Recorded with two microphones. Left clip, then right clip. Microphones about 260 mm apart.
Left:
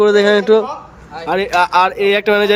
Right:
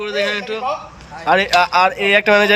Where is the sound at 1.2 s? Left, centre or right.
Centre.